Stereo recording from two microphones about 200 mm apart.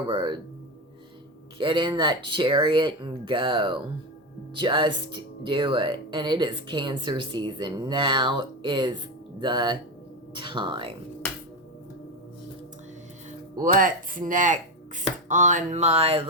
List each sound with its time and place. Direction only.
0.1 s speech: 25° right (ahead or behind)
1.5 s speech: 25° right (ahead or behind)
13.6 s speech: 40° right (ahead or behind)